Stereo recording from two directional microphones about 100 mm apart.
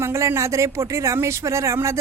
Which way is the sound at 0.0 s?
25° right (ahead or behind).